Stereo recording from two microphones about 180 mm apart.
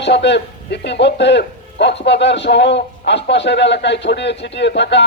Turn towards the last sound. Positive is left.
turn(degrees=75)  # may be behind; listen again after turning